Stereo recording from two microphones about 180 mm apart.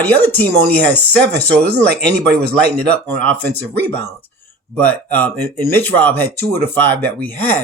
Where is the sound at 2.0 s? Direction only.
65° right (ahead or behind).